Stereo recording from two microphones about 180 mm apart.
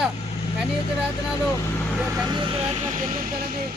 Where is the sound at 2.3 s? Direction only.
30° right (ahead or behind).